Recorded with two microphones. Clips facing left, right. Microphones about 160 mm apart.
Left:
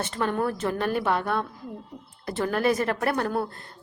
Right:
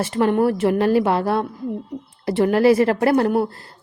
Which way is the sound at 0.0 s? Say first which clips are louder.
Right 9 dB; 25° right (ahead or behind).